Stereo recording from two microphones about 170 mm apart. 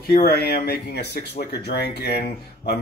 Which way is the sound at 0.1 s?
65° left (ahead or behind).